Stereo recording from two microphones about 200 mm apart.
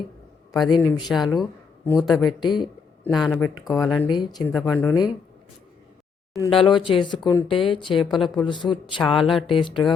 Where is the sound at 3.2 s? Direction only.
5° left (ahead or behind).